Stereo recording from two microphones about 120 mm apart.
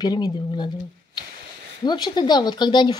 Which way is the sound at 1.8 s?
35° left (ahead or behind).